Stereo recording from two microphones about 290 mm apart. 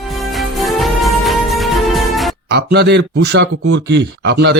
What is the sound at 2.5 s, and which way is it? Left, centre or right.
Speech, right.